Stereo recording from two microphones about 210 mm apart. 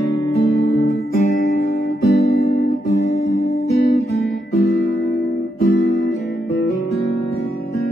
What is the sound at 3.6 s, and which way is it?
Music, 50° left (ahead or behind).